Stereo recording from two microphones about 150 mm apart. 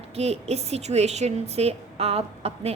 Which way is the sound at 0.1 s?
45° right (ahead or behind).